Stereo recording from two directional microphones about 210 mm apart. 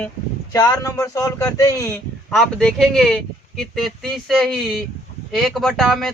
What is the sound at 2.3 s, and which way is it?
Speech, centre (ahead or behind).